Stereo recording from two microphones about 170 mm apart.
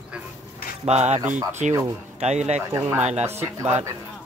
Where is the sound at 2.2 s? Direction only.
40° right (ahead or behind).